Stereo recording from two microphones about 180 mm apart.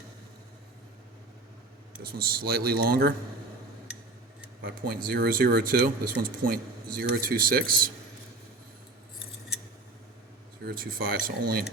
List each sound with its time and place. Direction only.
2.0 s speech: 55° right (ahead or behind)
4.6 s speech: 55° right (ahead or behind)
10.7 s speech: 50° right (ahead or behind)